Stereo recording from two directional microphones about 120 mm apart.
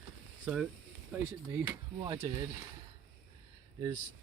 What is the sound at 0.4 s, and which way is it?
Speech, 5° right (ahead or behind).